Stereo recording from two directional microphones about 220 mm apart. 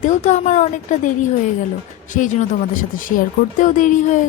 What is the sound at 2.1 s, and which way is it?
A woman's voice, 35° left (ahead or behind).